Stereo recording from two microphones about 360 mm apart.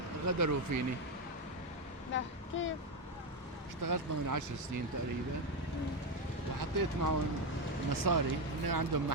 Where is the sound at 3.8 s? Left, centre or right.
Right.